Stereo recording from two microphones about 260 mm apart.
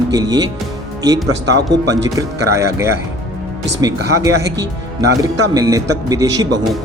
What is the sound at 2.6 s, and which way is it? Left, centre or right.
A man's voice, centre.